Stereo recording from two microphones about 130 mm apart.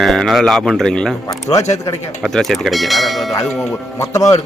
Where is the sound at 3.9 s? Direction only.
25° left (ahead or behind).